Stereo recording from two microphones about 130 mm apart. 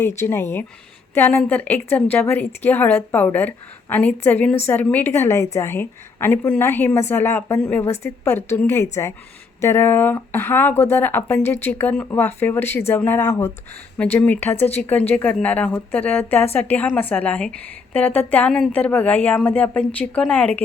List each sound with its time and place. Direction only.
0.2 s speech: 20° left (ahead or behind)